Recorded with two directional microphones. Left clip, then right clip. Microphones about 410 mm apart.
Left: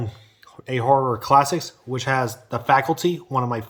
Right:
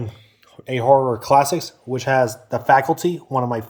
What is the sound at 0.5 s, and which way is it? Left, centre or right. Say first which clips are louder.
Speech: right 4 dB; left.